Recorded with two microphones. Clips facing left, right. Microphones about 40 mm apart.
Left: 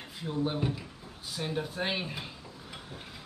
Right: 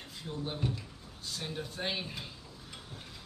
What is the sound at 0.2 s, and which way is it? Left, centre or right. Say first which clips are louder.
Speech: left 6 dB; centre.